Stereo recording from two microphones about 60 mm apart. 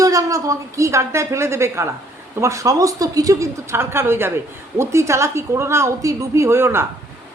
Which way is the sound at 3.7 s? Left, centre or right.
Right.